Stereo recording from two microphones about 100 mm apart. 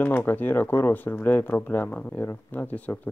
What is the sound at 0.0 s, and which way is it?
Speech, 20° left (ahead or behind).